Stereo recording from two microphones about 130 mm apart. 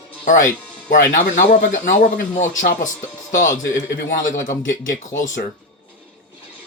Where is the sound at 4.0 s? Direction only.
90° left.